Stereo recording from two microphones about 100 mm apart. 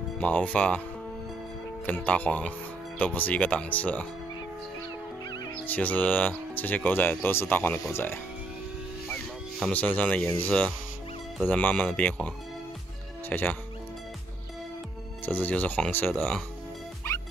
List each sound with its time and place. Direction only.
0.2 s speech: 15° left (ahead or behind)
1.9 s speech: 15° left (ahead or behind)
5.7 s speech: 15° left (ahead or behind)
9.7 s speech: 15° left (ahead or behind)
13.3 s speech: 15° left (ahead or behind)
15.2 s speech: 15° left (ahead or behind)
16.1 s speech: centre (ahead or behind)